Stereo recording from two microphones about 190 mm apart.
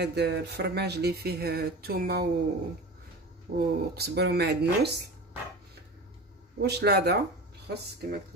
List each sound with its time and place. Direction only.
0.0 s speech: 60° right (ahead or behind)
3.5 s speech: 55° right (ahead or behind)
6.6 s speech: 60° right (ahead or behind)